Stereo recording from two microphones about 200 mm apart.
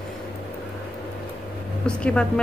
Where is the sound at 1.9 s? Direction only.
5° left (ahead or behind).